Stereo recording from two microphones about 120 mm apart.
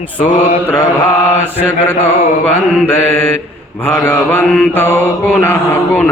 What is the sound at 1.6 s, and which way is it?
Mantra, 20° left (ahead or behind).